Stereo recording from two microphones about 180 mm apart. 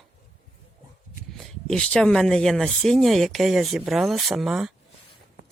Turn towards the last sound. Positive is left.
turn(degrees=-5)  # may be behind; listen again after turning